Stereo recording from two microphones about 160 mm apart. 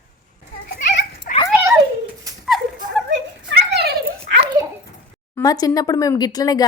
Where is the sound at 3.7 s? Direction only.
90° right.